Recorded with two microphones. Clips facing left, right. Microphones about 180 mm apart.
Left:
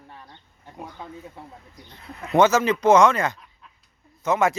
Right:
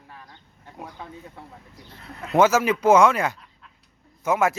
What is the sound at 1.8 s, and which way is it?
A man's voice, 5° right (ahead or behind).